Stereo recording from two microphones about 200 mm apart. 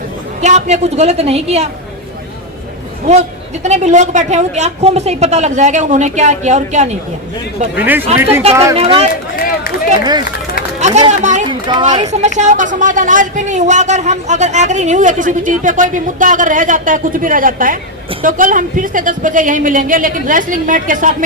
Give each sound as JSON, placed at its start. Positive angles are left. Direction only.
{"t": 0.4, "sound": "speech", "side_deg": -35}
{"t": 3.1, "sound": "speech", "side_deg": -35}
{"t": 7.8, "sound": "speech", "side_deg": -10}
{"t": 8.7, "sound": "speech", "side_deg": -30}
{"t": 9.3, "sound": "run", "side_deg": 50}
{"t": 10.8, "sound": "run", "side_deg": -35}
{"t": 11.1, "sound": "speech", "side_deg": -35}
{"t": 11.7, "sound": "speech", "side_deg": -20}
{"t": 12.0, "sound": "speech", "side_deg": -35}